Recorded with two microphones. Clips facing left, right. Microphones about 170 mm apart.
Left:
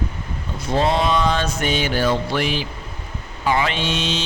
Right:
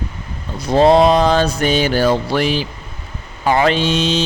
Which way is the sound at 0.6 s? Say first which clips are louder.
Right 9 dB; 35° right (ahead or behind).